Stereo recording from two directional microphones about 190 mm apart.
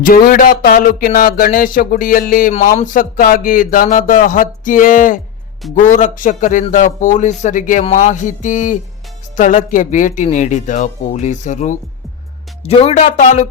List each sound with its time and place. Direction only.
0.0 s a man's voice: 50° left (ahead or behind)